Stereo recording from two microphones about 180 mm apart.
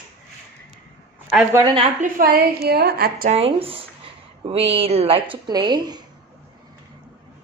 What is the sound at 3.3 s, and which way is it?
Speech, 35° right (ahead or behind).